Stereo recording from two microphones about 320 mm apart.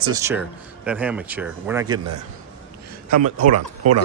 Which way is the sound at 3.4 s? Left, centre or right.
Right.